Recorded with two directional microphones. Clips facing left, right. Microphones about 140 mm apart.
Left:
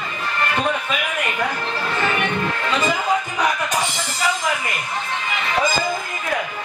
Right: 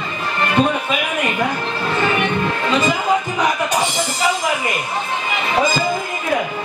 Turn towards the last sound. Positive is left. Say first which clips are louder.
# right 4 dB
turn(degrees=-20)  # may be behind; listen again after turning